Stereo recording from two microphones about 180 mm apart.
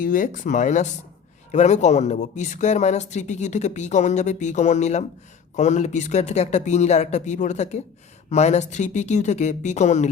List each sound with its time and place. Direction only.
0.0 s speech: 50° left (ahead or behind)